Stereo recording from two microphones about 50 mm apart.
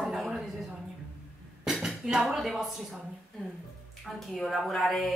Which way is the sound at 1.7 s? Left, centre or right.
Centre.